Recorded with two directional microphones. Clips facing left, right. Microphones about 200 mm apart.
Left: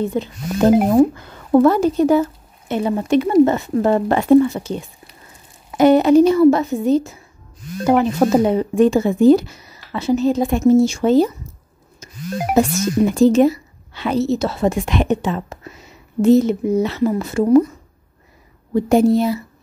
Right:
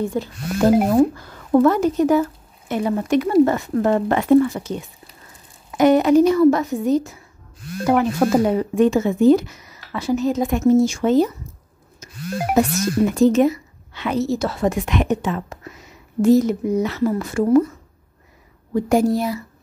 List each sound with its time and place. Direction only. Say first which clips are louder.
0.0 s a woman's voice: left 2 dB; 20° left (ahead or behind)
12.0 s music: left 1 dB; 30° left (ahead or behind)
12.5 s a woman's voice: left 2 dB; 30° left (ahead or behind)